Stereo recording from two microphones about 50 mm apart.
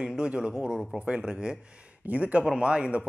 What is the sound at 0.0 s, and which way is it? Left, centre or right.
A man's voice, centre.